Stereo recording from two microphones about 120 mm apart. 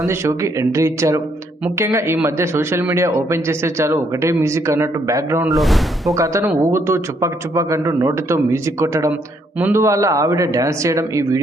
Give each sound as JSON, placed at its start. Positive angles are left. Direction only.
{"t": 0.0, "sound": "speech", "side_deg": -25}
{"t": 5.5, "sound": "speech", "side_deg": 0}
{"t": 6.1, "sound": "speech", "side_deg": -25}